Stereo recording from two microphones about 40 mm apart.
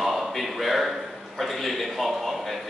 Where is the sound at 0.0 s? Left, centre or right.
Centre.